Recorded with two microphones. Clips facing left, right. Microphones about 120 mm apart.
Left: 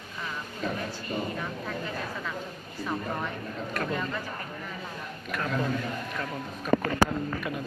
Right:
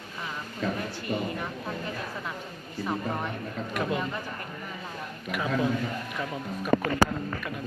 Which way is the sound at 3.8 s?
15° right (ahead or behind).